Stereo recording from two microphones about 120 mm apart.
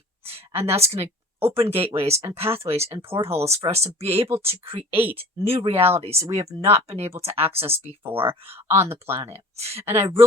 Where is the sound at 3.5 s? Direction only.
60° right (ahead or behind).